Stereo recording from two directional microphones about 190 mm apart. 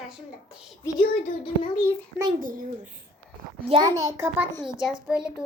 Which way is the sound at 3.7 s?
20° right (ahead or behind).